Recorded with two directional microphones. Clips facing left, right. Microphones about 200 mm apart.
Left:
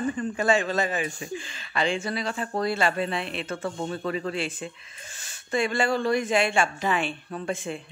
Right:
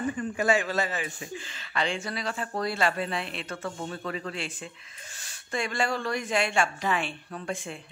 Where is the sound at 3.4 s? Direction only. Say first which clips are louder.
Left 4 dB; 25° left (ahead or behind).